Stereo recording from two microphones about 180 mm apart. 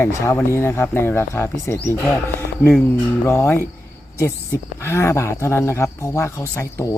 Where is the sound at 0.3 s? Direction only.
15° left (ahead or behind).